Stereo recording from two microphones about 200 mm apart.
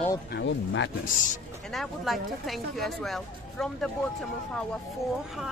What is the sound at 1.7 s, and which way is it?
Speech, centre (ahead or behind).